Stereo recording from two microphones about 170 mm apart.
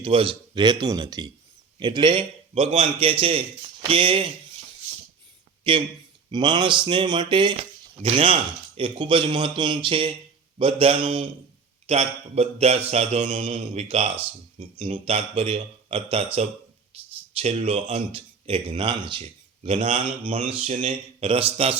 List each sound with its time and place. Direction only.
0.0 s speech: 30° right (ahead or behind)
5.7 s speech: 30° right (ahead or behind)
16.9 s a sound: 35° right (ahead or behind)
17.3 s speech: 35° right (ahead or behind)